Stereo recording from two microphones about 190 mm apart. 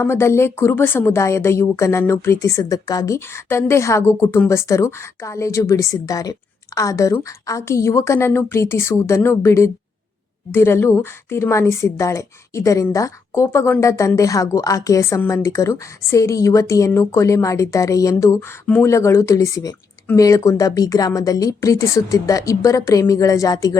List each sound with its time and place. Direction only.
0.0 s a woman's voice: 15° left (ahead or behind)